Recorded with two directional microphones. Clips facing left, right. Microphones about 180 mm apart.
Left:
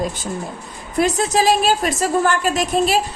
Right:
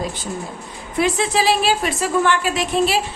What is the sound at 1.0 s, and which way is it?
A woman's voice, 40° left (ahead or behind).